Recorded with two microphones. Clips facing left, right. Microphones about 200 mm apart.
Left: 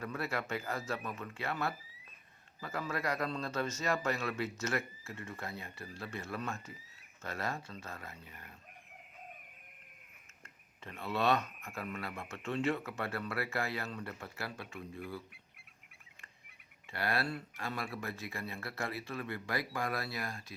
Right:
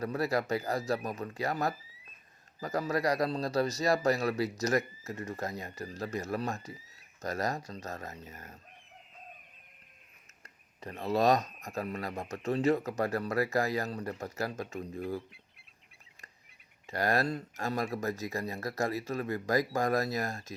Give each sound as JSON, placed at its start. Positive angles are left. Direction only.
{"t": 0.0, "sound": "speech", "side_deg": -40}
{"t": 10.8, "sound": "speech", "side_deg": -40}
{"t": 16.9, "sound": "speech", "side_deg": -40}